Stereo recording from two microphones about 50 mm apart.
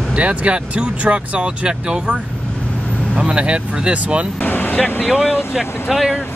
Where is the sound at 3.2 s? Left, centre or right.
Right.